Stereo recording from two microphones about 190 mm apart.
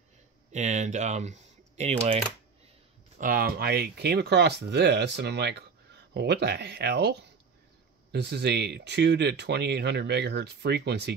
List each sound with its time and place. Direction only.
0.5 s speech: 40° right (ahead or behind)
3.2 s speech: 50° right (ahead or behind)